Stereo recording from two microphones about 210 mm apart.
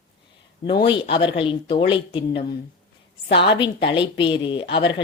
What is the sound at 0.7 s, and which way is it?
A woman's voice, 25° left (ahead or behind).